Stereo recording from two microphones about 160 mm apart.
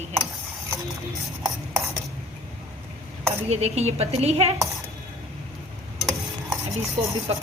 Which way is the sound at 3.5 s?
40° right (ahead or behind).